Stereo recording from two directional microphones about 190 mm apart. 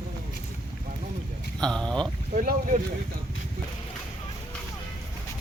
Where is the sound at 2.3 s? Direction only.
45° right (ahead or behind).